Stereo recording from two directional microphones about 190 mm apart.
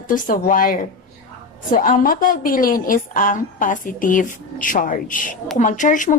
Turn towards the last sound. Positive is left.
turn(degrees=40)  # may be behind; listen again after turning